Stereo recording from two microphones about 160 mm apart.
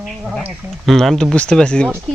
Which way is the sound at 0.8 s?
Centre (ahead or behind).